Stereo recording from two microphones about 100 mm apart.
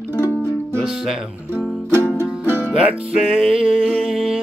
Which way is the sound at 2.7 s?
10° right (ahead or behind).